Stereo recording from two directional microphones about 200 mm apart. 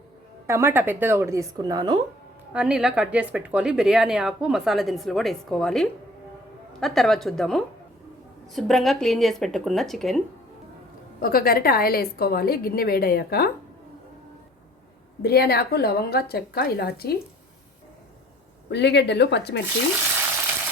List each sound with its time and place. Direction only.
0.4 s speech: 10° right (ahead or behind)
2.5 s speech: 5° right (ahead or behind)
11.2 s a woman's voice: 50° left (ahead or behind)
15.2 s a woman's voice: 50° left (ahead or behind)
18.7 s speech: 60° left (ahead or behind)